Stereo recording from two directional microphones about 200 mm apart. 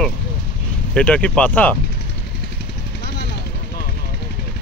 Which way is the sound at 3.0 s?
55° left (ahead or behind).